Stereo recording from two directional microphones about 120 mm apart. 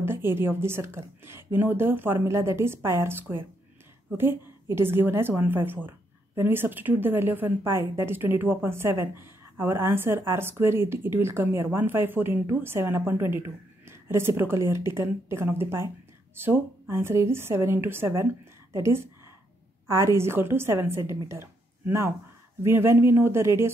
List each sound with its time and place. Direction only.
0.0 s a woman's voice: 20° right (ahead or behind)